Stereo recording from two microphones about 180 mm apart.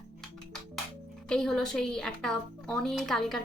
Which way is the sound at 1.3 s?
5° left (ahead or behind).